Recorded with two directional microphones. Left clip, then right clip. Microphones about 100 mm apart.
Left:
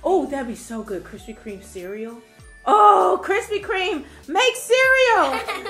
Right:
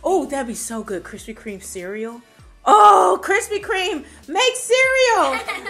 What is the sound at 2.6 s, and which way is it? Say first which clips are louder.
Groan: right 3 dB; 50° right (ahead or behind).